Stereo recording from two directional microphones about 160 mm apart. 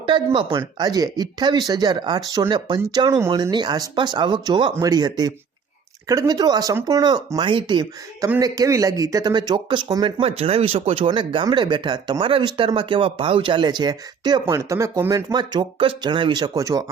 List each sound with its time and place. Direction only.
0.5 s speech: 25° right (ahead or behind)